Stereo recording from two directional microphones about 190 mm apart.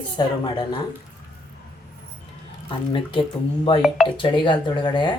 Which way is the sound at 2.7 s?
25° left (ahead or behind).